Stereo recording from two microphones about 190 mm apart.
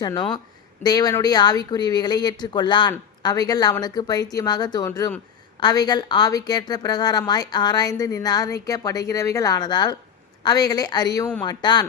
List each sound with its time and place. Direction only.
0.0 s a woman's voice: 20° left (ahead or behind)